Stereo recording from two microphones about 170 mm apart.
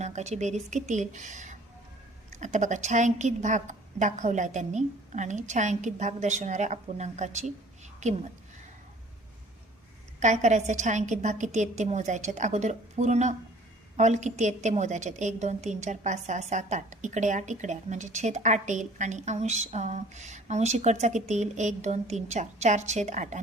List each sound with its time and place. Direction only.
0.0 s a woman's voice: 40° right (ahead or behind)
10.2 s a woman's voice: 45° right (ahead or behind)